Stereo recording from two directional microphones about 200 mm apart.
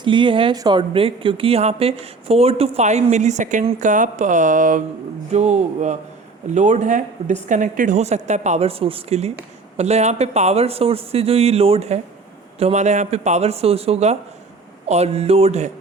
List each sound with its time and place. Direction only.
0.0 s a woman's voice: 25° right (ahead or behind)